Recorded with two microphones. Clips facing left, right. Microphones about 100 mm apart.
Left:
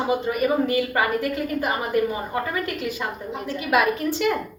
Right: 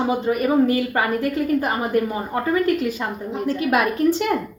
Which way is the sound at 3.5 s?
40° right (ahead or behind).